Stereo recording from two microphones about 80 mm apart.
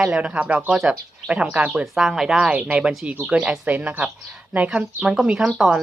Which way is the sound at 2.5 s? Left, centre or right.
Centre.